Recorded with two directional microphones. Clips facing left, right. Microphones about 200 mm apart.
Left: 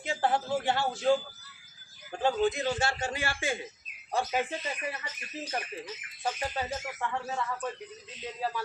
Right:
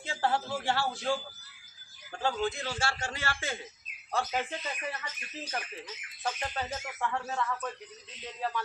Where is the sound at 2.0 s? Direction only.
20° left (ahead or behind).